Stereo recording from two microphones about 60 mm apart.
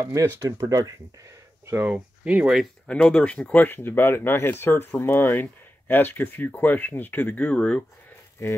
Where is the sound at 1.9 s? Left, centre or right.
Centre.